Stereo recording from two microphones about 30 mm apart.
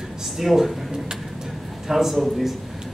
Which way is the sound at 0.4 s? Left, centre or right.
Centre.